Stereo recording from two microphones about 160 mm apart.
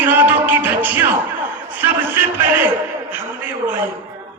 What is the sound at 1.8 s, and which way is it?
Speech, 15° right (ahead or behind).